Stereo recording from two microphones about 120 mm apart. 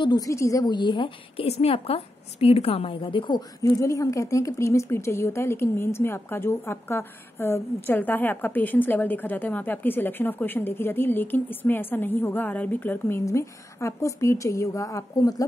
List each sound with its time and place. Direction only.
0.0 s a woman's voice: 35° left (ahead or behind)